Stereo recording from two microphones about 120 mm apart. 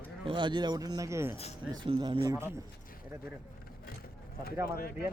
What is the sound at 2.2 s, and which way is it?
Speech, 25° right (ahead or behind).